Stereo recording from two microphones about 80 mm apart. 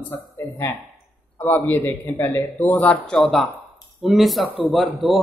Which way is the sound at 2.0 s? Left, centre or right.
Left.